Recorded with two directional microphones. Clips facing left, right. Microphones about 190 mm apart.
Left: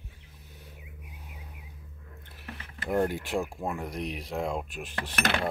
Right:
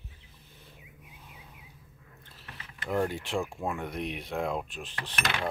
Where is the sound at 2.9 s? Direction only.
20° left (ahead or behind).